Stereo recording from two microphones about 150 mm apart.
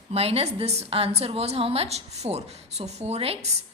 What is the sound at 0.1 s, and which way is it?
A woman's voice, 40° right (ahead or behind).